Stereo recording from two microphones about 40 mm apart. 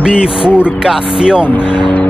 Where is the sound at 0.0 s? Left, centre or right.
Centre.